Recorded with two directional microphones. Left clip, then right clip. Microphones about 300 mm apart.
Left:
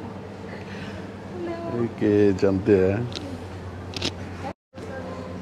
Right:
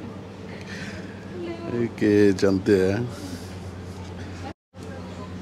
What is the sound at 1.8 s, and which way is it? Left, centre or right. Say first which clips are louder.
Speech: right 1 dB; right.